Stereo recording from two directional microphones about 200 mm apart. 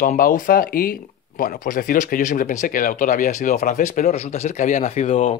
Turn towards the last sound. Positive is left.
turn(degrees=35)  # may be behind; listen again after turning